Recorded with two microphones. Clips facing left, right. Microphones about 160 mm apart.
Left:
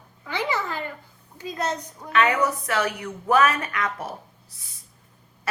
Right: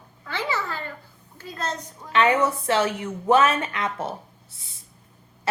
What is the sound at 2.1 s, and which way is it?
A woman's voice, 25° right (ahead or behind).